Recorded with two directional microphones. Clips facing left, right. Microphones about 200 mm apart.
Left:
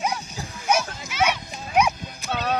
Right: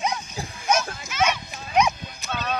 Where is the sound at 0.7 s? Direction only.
10° left (ahead or behind).